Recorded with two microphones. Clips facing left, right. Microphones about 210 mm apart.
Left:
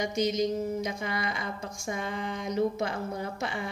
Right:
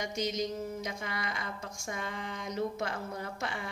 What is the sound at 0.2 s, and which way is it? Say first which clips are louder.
A woman's voice: left 6 dB; 20° left (ahead or behind).